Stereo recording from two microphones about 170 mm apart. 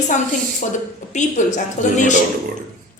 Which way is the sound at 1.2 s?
45° left (ahead or behind).